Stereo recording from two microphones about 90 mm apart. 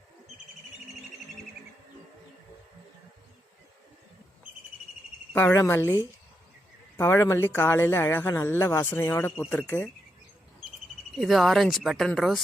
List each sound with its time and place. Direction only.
5.3 s speech: 25° left (ahead or behind)
6.9 s speech: 30° left (ahead or behind)
11.1 s speech: centre (ahead or behind)